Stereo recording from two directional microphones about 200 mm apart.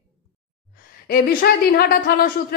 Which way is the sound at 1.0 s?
45° left (ahead or behind).